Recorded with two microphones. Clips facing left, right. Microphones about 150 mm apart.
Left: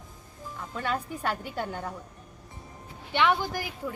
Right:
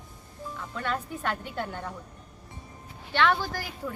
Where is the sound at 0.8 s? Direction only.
5° left (ahead or behind).